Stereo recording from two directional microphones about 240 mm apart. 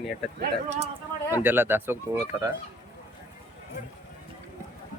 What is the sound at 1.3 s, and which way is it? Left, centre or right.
Speech, centre.